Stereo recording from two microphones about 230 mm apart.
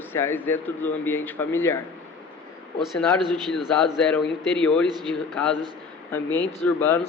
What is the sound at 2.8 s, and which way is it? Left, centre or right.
A man's voice, centre.